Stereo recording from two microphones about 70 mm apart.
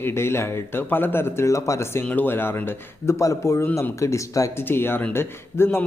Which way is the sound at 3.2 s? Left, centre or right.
Left.